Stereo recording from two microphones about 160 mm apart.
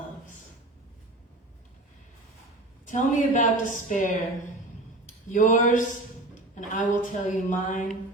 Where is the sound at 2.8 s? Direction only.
55° left (ahead or behind).